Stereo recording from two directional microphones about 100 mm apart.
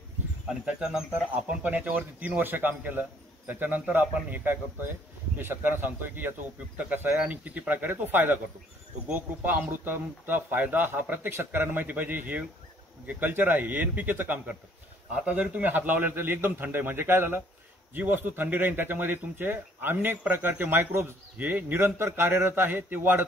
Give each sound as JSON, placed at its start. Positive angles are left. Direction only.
{"t": 0.7, "sound": "speech", "side_deg": -10}